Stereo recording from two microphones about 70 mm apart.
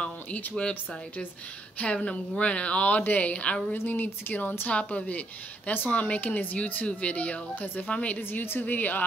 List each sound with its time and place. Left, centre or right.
0.0 s a woman's voice: centre
3.7 s speech: left
8.2 s speech: left